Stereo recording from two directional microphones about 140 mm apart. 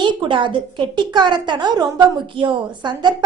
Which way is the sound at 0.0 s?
35° right (ahead or behind).